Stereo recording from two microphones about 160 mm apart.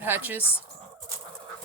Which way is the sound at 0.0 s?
10° right (ahead or behind).